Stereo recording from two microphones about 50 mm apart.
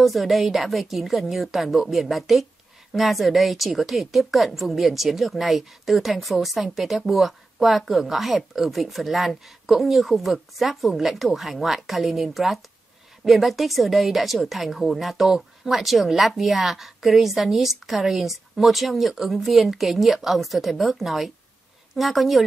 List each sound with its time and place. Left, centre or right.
0.0 s speech: centre